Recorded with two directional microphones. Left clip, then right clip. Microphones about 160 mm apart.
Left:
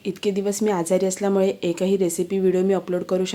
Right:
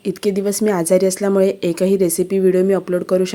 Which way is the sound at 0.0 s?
30° right (ahead or behind).